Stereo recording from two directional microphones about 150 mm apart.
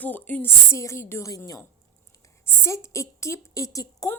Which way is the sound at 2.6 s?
20° left (ahead or behind).